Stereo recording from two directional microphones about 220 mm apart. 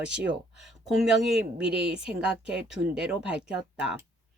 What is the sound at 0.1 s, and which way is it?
Speech, 5° right (ahead or behind).